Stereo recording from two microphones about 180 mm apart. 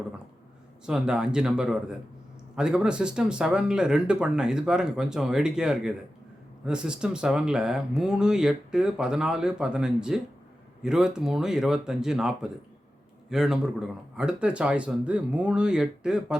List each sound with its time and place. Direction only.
0.9 s speech: 5° right (ahead or behind)